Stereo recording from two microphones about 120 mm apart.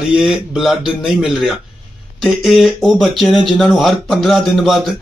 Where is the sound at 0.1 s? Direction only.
5° right (ahead or behind).